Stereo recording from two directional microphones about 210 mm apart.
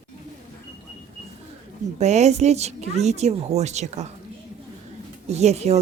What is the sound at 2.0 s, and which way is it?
Speech, 30° right (ahead or behind).